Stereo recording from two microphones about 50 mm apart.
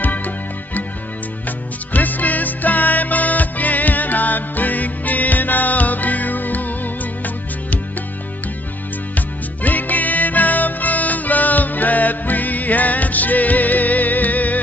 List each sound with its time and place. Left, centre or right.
0.0 s music: left
2.0 s music: left
9.1 s music: left